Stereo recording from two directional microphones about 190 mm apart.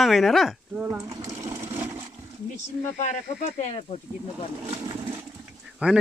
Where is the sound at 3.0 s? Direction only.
35° left (ahead or behind).